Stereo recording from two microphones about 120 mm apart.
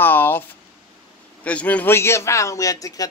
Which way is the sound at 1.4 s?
10° left (ahead or behind).